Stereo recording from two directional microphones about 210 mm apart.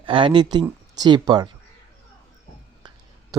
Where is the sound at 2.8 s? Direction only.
20° right (ahead or behind).